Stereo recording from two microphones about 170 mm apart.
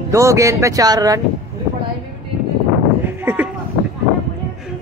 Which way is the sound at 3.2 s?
10° right (ahead or behind).